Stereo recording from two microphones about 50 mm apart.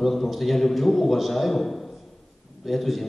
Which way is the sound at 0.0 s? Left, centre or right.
Centre.